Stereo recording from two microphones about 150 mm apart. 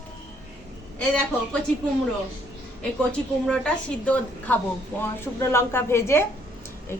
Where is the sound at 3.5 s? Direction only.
5° left (ahead or behind).